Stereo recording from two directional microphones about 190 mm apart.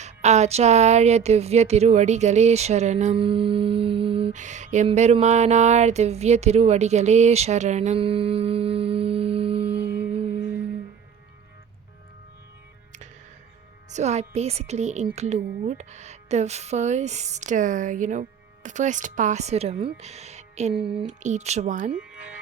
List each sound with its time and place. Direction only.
0.0 s speech: 35° right (ahead or behind)
10.0 s music: 30° right (ahead or behind)
13.9 s speech: 35° right (ahead or behind)
21.1 s speech: 40° right (ahead or behind)